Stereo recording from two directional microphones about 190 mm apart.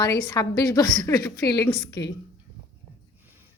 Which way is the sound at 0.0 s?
20° left (ahead or behind).